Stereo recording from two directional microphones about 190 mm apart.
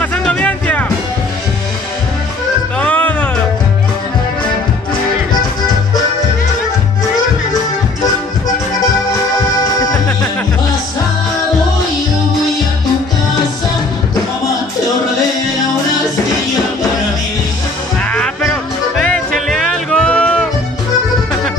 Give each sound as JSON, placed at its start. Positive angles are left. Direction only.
{"t": 0.0, "sound": "music", "side_deg": 5}
{"t": 2.8, "sound": "music", "side_deg": 10}
{"t": 18.1, "sound": "music", "side_deg": 5}